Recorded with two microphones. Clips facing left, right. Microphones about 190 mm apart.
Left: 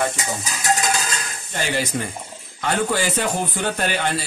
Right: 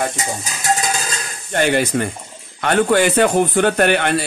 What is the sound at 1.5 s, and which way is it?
Speech, 60° right (ahead or behind).